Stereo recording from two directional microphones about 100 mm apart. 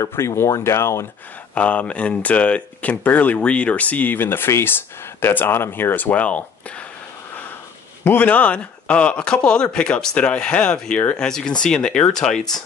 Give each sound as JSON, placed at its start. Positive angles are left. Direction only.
{"t": 0.0, "sound": "speech", "side_deg": 30}
{"t": 1.5, "sound": "speech", "side_deg": 15}
{"t": 8.0, "sound": "speech", "side_deg": 20}